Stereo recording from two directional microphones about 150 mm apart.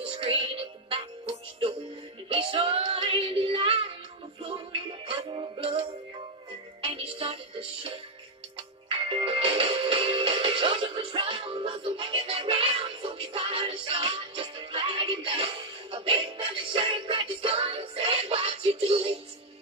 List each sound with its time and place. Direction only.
0.0 s music: 40° right (ahead or behind)